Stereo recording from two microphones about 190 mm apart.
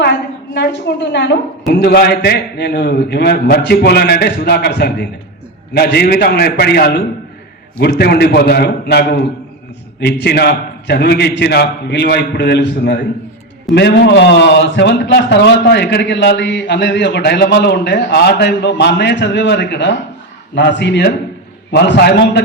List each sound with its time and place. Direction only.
0.0 s a man's voice: 60° left (ahead or behind)